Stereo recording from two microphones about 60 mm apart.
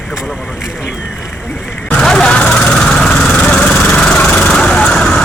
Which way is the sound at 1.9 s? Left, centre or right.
Centre.